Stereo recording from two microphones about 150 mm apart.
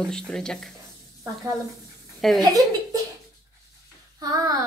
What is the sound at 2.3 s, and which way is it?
Speech, 25° right (ahead or behind).